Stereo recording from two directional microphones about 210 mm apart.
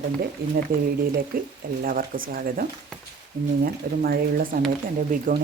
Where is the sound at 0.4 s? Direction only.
45° right (ahead or behind).